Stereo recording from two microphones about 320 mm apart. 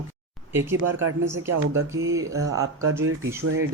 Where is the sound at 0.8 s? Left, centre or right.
Right.